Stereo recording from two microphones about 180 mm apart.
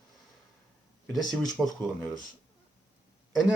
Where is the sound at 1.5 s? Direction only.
Centre (ahead or behind).